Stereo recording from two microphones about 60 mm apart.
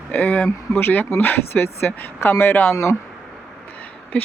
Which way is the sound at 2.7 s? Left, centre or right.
Left.